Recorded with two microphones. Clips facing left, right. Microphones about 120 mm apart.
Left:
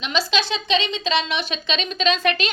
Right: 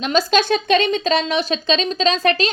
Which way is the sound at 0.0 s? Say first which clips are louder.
Right 6 dB; 45° right (ahead or behind).